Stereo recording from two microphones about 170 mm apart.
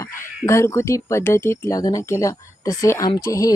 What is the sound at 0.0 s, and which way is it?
A woman's voice, 15° left (ahead or behind).